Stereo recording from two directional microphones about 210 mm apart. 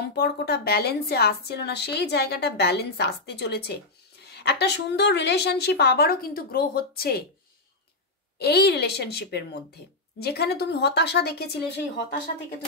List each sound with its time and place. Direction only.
0.0 s a woman's voice: 50° left (ahead or behind)
8.4 s a woman's voice: 50° left (ahead or behind)